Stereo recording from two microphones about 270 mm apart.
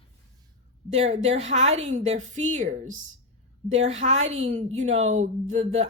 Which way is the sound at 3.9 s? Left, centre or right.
Right.